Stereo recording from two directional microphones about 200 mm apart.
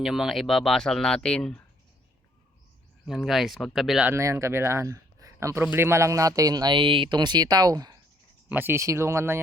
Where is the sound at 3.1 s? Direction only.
Centre (ahead or behind).